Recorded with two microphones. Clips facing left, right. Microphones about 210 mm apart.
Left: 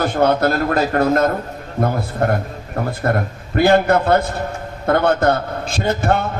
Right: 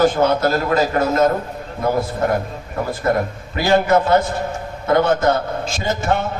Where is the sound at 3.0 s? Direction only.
55° left (ahead or behind).